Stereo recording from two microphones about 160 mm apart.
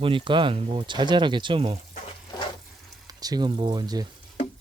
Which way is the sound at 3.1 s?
25° right (ahead or behind).